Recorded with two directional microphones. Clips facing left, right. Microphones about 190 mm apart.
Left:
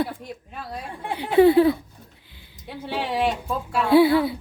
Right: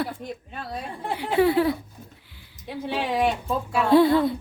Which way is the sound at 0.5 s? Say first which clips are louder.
Left 2 dB; 5° left (ahead or behind).